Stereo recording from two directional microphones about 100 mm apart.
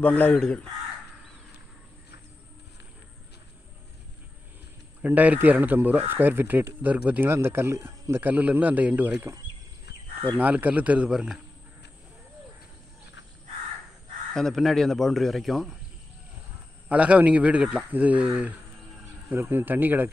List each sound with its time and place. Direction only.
0.0 s speech: 15° left (ahead or behind)
5.0 s a man's voice: 15° right (ahead or behind)
10.3 s speech: 15° right (ahead or behind)
14.3 s speech: 5° left (ahead or behind)
16.9 s a man's voice: 15° right (ahead or behind)